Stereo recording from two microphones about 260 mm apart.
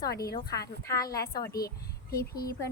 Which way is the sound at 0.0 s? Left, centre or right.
Left.